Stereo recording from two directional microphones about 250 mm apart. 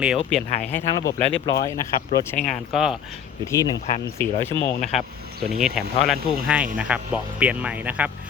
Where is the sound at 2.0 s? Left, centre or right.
Left.